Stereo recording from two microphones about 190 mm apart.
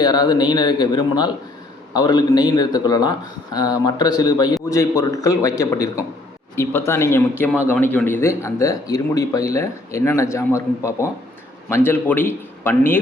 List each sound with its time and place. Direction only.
0.0 s speech: 20° left (ahead or behind)